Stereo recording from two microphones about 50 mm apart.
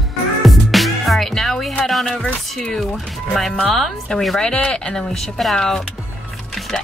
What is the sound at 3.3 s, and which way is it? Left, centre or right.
Speech, centre.